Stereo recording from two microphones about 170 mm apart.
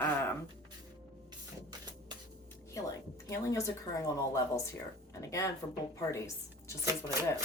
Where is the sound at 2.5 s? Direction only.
15° left (ahead or behind).